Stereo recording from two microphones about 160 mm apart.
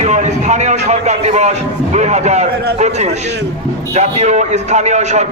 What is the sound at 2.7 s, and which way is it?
A man's voice, 45° right (ahead or behind).